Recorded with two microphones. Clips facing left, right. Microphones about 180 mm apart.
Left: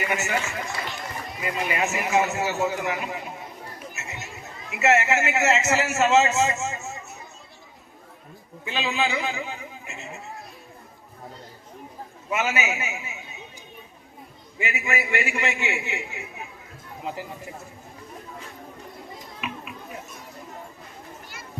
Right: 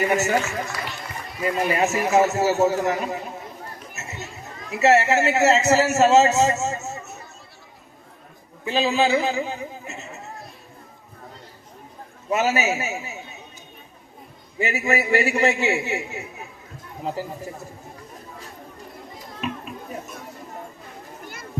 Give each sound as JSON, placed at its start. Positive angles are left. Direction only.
{"t": 0.0, "sound": "a man's voice", "side_deg": -40}
{"t": 1.6, "sound": "a man's voice", "side_deg": -40}
{"t": 4.0, "sound": "chatter", "side_deg": -40}
{"t": 4.7, "sound": "a man's voice", "side_deg": -35}
{"t": 8.6, "sound": "a man's voice", "side_deg": -35}
{"t": 12.3, "sound": "a man's voice", "side_deg": -40}
{"t": 14.6, "sound": "a man's voice", "side_deg": -40}
{"t": 19.4, "sound": "a sound", "side_deg": -40}